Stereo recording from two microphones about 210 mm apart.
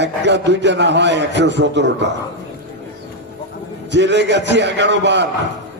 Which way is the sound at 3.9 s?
55° right (ahead or behind).